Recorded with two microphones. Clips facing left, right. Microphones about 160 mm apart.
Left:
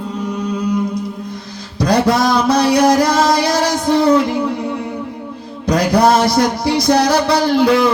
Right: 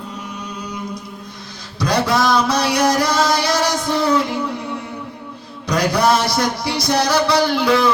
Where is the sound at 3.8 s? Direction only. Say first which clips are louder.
Left 10 dB; 55° left (ahead or behind).